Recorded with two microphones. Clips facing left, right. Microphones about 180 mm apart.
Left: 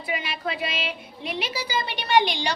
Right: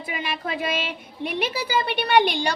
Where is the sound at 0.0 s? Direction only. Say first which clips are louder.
Even; 45° right (ahead or behind).